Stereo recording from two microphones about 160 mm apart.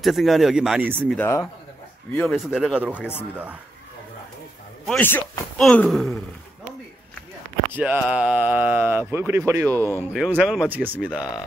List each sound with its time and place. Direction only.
0.0 s speech: centre (ahead or behind)
1.1 s speech: 15° left (ahead or behind)
2.1 s speech: centre (ahead or behind)
3.0 s speech: 15° left (ahead or behind)
4.8 s speech: 10° left (ahead or behind)
7.7 s speech: 10° right (ahead or behind)
10.1 s speech: 5° right (ahead or behind)